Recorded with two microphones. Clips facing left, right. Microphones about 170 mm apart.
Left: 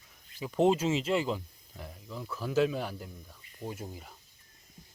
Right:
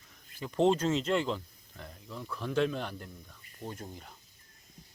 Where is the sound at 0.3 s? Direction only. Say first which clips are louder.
Left 1 dB; 5° left (ahead or behind).